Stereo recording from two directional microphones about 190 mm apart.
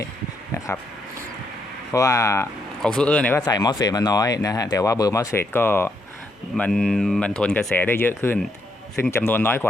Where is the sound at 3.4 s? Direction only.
20° left (ahead or behind).